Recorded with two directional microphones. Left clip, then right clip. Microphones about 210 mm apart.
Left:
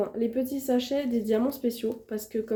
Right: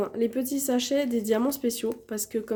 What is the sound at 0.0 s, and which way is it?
Speech, 30° right (ahead or behind).